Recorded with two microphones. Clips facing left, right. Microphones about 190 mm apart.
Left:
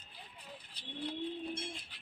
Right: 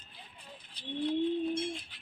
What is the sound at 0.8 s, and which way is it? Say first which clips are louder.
Bird: right 7 dB; 35° left (ahead or behind).